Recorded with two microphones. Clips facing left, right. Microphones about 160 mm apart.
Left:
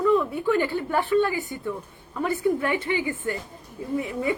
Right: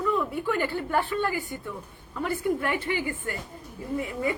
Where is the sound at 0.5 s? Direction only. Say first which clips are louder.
Left 1 dB; 20° left (ahead or behind).